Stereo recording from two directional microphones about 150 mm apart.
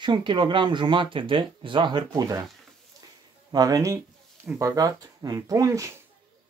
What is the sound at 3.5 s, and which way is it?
Speech, 25° right (ahead or behind).